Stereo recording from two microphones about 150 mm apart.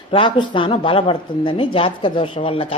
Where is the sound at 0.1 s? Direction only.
30° left (ahead or behind).